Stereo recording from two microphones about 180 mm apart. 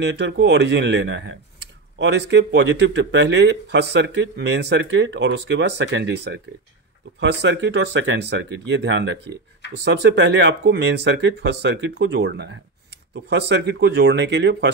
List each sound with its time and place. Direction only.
0.0 s speech: 75° right (ahead or behind)